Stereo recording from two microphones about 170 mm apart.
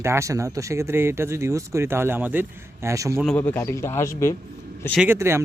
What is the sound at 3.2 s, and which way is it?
Speech, 10° left (ahead or behind).